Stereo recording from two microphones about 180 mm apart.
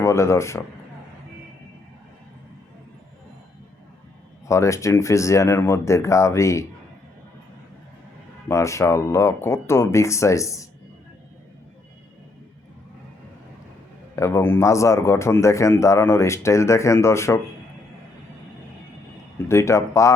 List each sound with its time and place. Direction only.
0.0 s a man's voice: 15° left (ahead or behind)
4.4 s a man's voice: 15° left (ahead or behind)
8.4 s a man's voice: 15° left (ahead or behind)
14.2 s a man's voice: 15° left (ahead or behind)
19.5 s a man's voice: 15° left (ahead or behind)